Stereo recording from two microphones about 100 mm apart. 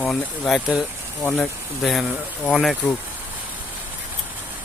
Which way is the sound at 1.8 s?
Centre (ahead or behind).